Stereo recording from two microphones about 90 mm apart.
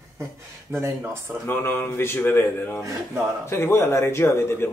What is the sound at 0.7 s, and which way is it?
Speech, 30° right (ahead or behind).